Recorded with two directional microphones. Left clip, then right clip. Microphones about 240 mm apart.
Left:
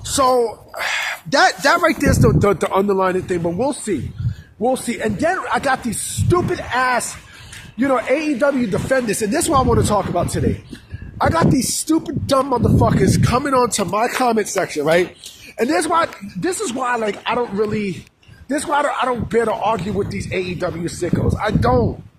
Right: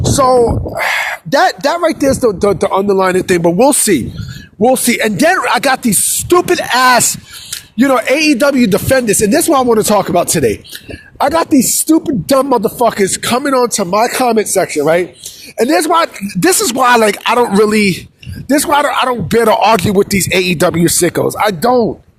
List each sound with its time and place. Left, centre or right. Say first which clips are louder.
0.2 s speech: right 6 dB; right
3.0 s speech: right 8 dB; right
15.5 s speech: right 6 dB; right
18.4 s speech: right 7 dB; right